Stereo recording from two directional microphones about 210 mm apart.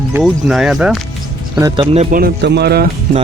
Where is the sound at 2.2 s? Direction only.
50° right (ahead or behind).